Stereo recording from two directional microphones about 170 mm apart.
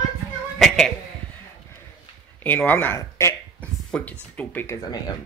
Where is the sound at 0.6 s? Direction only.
Centre (ahead or behind).